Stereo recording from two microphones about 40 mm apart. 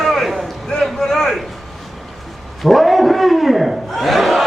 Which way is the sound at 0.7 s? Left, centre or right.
Centre.